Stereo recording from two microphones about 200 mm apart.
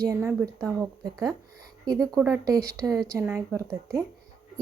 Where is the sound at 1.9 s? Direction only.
Centre (ahead or behind).